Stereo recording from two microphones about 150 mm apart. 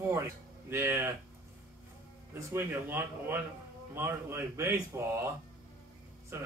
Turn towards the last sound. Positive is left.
turn(degrees=-15)  # may be behind; listen again after turning